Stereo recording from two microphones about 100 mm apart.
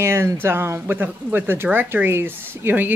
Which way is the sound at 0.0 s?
25° right (ahead or behind).